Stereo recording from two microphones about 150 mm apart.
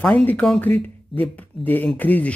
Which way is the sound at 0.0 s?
10° left (ahead or behind).